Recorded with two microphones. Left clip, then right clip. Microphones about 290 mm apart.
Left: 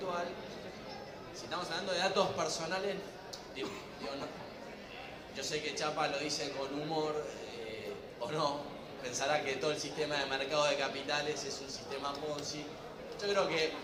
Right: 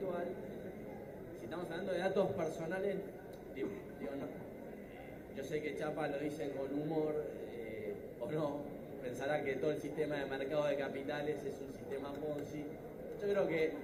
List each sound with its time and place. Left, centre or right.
1.5 s a man's voice: centre
5.4 s a man's voice: centre
8.3 s a man's voice: centre
13.2 s a man's voice: centre